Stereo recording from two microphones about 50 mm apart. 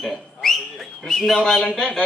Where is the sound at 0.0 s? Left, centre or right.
Centre.